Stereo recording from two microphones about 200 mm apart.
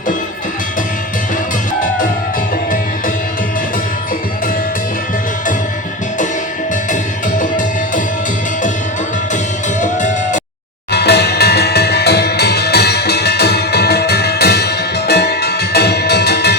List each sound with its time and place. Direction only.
7.3 s music: 40° left (ahead or behind)
9.8 s music: 40° left (ahead or behind)
10.9 s music: 55° left (ahead or behind)